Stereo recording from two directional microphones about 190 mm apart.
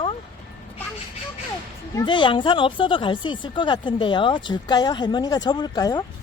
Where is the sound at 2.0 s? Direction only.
25° left (ahead or behind).